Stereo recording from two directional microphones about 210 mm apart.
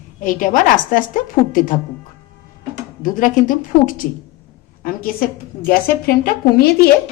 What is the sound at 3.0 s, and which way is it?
A woman's voice, 40° left (ahead or behind).